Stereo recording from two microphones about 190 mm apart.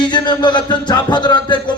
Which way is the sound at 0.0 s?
25° left (ahead or behind).